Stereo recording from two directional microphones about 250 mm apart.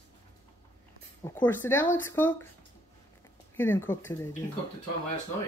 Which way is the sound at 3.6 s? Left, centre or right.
Centre.